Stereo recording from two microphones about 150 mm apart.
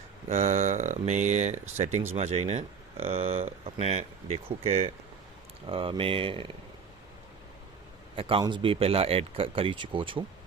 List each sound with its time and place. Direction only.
0.3 s speech: 45° right (ahead or behind)
8.1 s speech: 35° right (ahead or behind)